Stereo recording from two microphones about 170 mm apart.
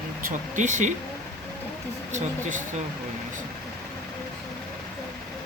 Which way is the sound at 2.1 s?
45° right (ahead or behind).